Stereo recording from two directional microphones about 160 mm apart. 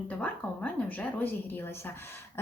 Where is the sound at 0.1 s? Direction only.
10° left (ahead or behind).